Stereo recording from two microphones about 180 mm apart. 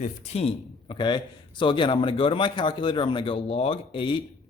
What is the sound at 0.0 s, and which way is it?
A man's voice, 35° left (ahead or behind).